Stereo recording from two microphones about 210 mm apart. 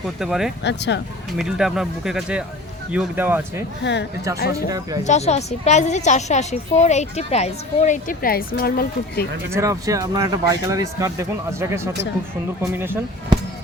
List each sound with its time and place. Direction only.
0.2 s speech: centre (ahead or behind)
0.6 s speech: 55° left (ahead or behind)
1.3 s speech: centre (ahead or behind)
4.4 s speech: 50° left (ahead or behind)
5.0 s a woman's voice: 35° left (ahead or behind)
9.5 s speech: 15° right (ahead or behind)